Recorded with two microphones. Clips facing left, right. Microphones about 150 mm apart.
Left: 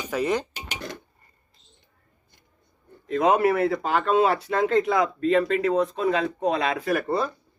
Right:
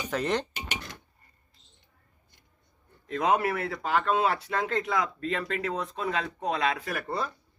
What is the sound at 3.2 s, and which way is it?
Speech, 25° left (ahead or behind).